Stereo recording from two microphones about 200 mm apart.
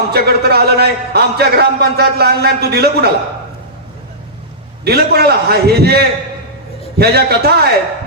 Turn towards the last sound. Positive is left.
turn(degrees=-50)  # may be behind; listen again after turning